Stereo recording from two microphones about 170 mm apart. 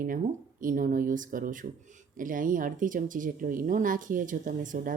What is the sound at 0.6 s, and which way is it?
Speech, 50° right (ahead or behind).